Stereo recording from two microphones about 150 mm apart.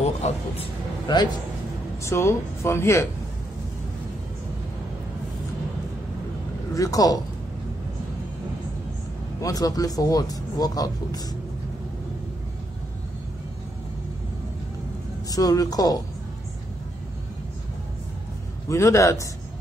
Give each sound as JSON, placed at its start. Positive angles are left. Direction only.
{"t": 0.0, "sound": "speech", "side_deg": 45}
{"t": 1.0, "sound": "a man's voice", "side_deg": 30}
{"t": 2.0, "sound": "speech", "side_deg": 20}
{"t": 6.7, "sound": "speech", "side_deg": 25}
{"t": 9.4, "sound": "speech", "side_deg": 25}
{"t": 15.2, "sound": "speech", "side_deg": 25}
{"t": 18.7, "sound": "speech", "side_deg": 20}